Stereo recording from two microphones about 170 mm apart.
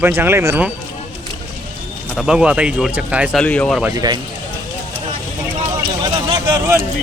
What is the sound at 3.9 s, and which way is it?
Speech, 20° right (ahead or behind).